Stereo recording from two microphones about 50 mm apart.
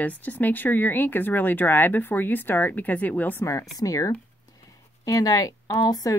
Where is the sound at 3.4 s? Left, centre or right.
Left.